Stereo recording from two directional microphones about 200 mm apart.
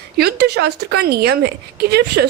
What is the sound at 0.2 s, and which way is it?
A woman's voice, 55° right (ahead or behind).